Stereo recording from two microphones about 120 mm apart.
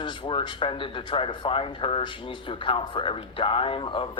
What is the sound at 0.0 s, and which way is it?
A woman's voice, 40° left (ahead or behind).